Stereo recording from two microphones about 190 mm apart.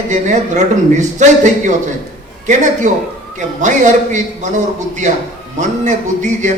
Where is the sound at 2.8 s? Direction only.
40° right (ahead or behind).